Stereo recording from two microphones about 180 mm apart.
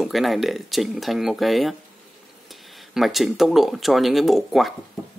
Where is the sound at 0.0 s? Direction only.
Centre (ahead or behind).